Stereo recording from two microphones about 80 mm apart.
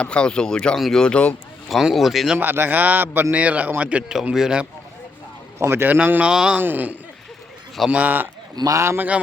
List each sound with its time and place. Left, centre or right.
0.0 s speech: centre
1.7 s speech: centre
2.4 s a man's voice: right; by 4.6 s centre
5.5 s a man's voice: right; by 6.6 s centre
6.6 s a man's voice: right
8.5 s a man's voice: right